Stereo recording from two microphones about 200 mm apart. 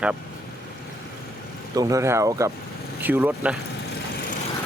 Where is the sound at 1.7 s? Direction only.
15° right (ahead or behind).